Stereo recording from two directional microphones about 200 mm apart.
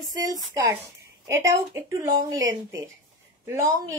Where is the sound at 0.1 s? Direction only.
20° right (ahead or behind).